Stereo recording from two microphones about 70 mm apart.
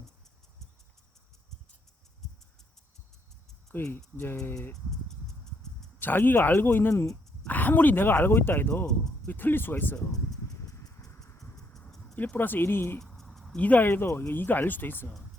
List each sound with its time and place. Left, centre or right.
3.9 s speech: left
4.7 s a sound: centre
6.0 s speech: left
12.1 s speech: left
13.0 s a sound: centre
13.6 s speech: left